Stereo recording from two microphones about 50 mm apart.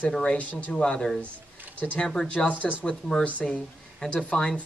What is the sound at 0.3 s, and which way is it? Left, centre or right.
Speech, left.